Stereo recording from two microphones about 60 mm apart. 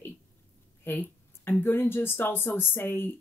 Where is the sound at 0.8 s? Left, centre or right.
Left.